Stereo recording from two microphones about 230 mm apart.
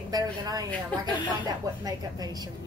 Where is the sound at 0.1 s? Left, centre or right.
Centre.